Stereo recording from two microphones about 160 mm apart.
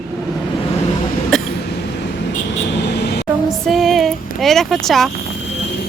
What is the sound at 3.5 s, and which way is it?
A child's voice, centre (ahead or behind).